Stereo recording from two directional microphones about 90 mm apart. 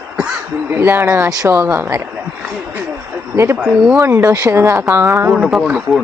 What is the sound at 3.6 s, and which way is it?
Speech, 5° right (ahead or behind).